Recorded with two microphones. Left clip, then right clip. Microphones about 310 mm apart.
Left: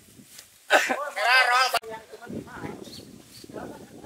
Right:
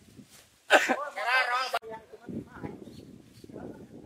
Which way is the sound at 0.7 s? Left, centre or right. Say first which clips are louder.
Left 1 dB; centre.